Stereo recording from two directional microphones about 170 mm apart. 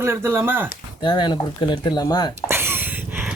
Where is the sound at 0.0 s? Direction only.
15° right (ahead or behind).